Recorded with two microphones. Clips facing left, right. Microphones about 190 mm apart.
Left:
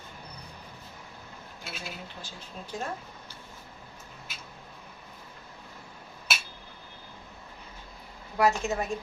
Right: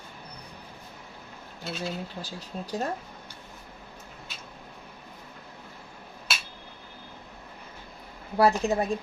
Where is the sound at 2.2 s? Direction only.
40° right (ahead or behind).